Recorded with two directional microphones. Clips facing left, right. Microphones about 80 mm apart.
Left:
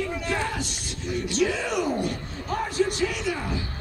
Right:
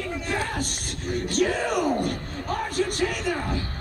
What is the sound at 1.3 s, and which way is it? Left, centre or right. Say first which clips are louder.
Speech: right 1 dB; right.